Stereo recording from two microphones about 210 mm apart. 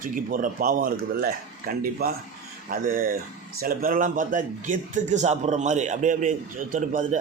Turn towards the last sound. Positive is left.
turn(degrees=-35)  # may be behind; listen again after turning